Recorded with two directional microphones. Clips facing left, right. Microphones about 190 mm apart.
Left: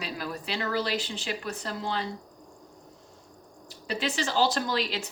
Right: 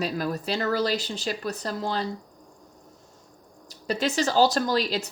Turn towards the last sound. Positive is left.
turn(degrees=-40)  # may be behind; listen again after turning